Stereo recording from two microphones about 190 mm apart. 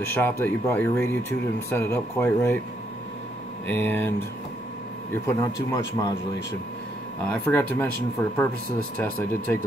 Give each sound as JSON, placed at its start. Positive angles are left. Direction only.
{"t": 0.0, "sound": "speech", "side_deg": 10}
{"t": 3.6, "sound": "speech", "side_deg": 10}
{"t": 5.2, "sound": "speech", "side_deg": 15}
{"t": 7.2, "sound": "speech", "side_deg": 10}
{"t": 8.9, "sound": "speech", "side_deg": 5}